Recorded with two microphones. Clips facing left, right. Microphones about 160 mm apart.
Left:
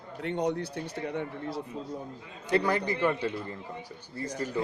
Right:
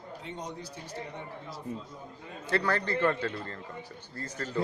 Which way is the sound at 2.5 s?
15° left (ahead or behind).